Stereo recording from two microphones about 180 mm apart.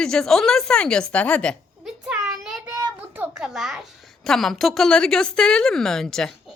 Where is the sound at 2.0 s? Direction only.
5° right (ahead or behind).